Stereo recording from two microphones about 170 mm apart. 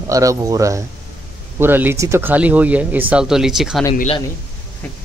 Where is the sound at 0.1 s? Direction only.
20° right (ahead or behind); by 3.8 s 5° right (ahead or behind).